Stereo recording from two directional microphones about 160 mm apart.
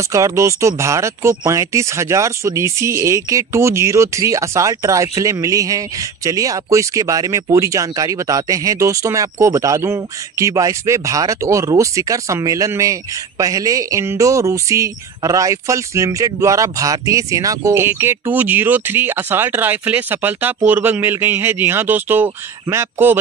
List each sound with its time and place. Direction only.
0.1 s speech: 20° right (ahead or behind)